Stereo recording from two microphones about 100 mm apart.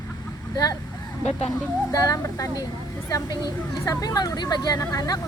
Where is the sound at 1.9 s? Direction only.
40° left (ahead or behind).